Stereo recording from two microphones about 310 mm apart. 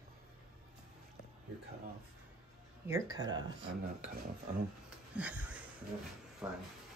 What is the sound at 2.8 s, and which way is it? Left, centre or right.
Speech, centre.